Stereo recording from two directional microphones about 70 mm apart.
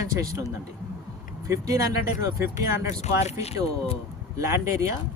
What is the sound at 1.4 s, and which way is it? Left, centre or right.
Speech, right.